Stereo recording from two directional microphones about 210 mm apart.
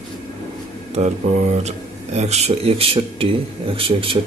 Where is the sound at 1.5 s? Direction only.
30° right (ahead or behind).